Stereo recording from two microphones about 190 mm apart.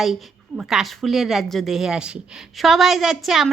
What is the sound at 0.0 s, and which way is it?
A woman's voice, centre (ahead or behind).